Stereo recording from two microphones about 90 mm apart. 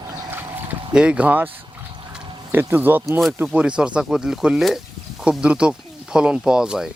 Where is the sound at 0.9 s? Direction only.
15° right (ahead or behind).